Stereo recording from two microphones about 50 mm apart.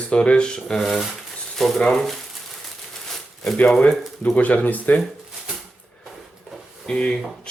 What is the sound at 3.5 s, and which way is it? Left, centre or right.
Speech, left.